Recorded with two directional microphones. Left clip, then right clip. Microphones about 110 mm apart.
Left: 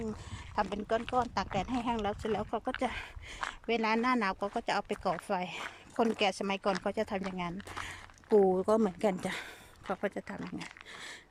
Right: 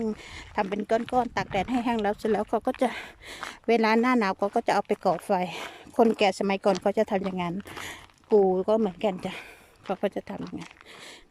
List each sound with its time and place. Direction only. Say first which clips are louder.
0.3 s speech: right 4 dB; 35° right (ahead or behind)
8.3 s speech: right 5 dB; 10° right (ahead or behind)
9.9 s speech: right 6 dB; 25° right (ahead or behind)